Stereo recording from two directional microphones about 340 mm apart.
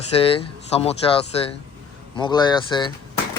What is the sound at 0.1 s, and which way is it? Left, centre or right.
Speech, centre.